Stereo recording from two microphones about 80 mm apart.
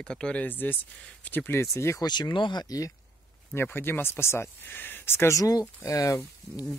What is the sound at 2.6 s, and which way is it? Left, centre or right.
Speech, left.